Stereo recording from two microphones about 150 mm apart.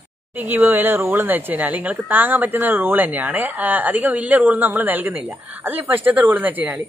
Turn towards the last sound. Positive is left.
turn(degrees=-10)  # may be behind; listen again after turning